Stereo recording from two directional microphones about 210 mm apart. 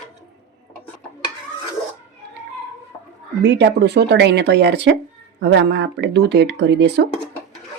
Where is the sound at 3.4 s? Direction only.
55° right (ahead or behind).